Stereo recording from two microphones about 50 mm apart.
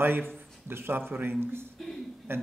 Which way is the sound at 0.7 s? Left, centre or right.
Right.